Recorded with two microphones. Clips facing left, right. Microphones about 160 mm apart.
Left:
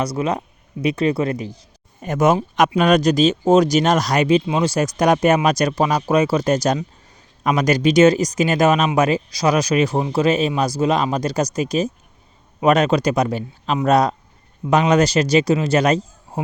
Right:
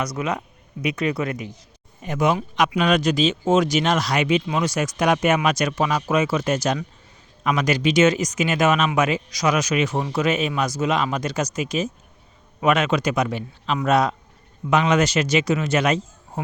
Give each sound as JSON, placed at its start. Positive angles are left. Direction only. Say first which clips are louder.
{"t": 0.0, "sound": "speech", "louder": "left 4 dB", "side_deg": 30}
{"t": 2.0, "sound": "speech", "louder": "left 5 dB", "side_deg": 45}